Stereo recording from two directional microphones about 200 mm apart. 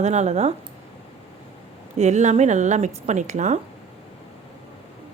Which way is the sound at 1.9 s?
35° right (ahead or behind).